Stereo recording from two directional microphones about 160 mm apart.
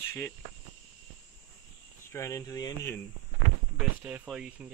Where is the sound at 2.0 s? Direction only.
20° left (ahead or behind).